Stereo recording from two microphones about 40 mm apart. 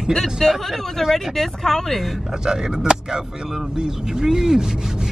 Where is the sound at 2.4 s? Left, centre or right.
Centre.